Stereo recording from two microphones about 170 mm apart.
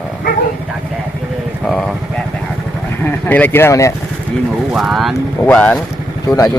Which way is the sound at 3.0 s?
10° left (ahead or behind).